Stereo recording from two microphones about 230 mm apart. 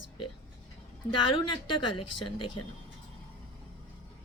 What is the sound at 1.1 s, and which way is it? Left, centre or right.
Speech, left.